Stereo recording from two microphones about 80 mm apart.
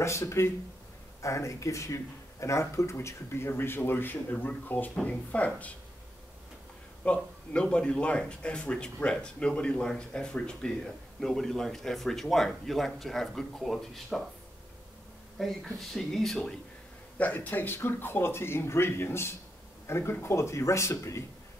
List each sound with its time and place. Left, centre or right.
0.0 s speech: left; by 5.7 s centre
7.1 s speech: centre
15.3 s speech: centre
17.2 s speech: left